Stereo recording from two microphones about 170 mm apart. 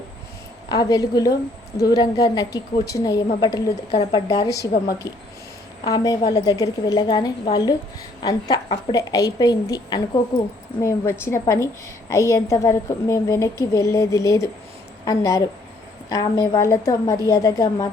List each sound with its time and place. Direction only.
0.7 s a woman's voice: 25° left (ahead or behind)
3.9 s a woman's voice: 30° left (ahead or behind)
5.8 s a woman's voice: 20° left (ahead or behind)